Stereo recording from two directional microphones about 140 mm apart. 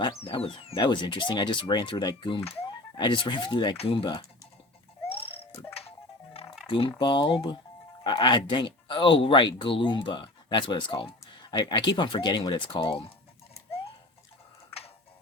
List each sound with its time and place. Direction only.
0.0 s speech: 40° left (ahead or behind)
6.7 s speech: 40° left (ahead or behind)